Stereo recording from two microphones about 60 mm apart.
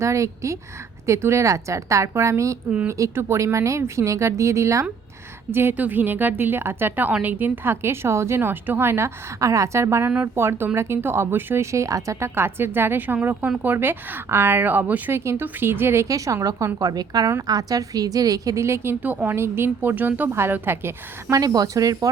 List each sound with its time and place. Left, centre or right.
0.0 s speech: right
5.5 s speech: right
5.7 s speech: right
9.4 s speech: right
11.6 s speech: right
12.3 s speech: right
15.1 s speech: right
16.0 s a woman's voice: right
19.0 s speech: right
20.3 s speech: right
21.2 s speech: right